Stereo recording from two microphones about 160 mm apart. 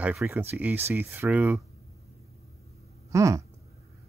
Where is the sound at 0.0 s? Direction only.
10° right (ahead or behind).